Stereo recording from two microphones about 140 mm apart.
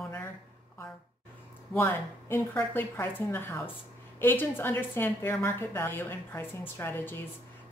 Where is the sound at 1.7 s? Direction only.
15° left (ahead or behind).